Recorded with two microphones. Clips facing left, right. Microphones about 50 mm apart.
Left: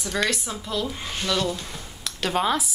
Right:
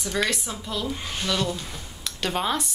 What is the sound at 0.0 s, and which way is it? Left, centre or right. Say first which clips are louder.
Speech: left 1 dB; centre.